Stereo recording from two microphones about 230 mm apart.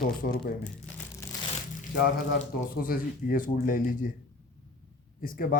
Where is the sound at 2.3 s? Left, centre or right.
Left.